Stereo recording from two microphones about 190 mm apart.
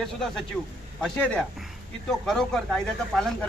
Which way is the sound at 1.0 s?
5° left (ahead or behind).